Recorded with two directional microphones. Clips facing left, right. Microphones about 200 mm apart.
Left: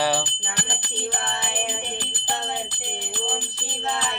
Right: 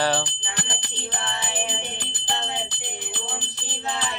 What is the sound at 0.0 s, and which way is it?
Jingle bell, 10° left (ahead or behind).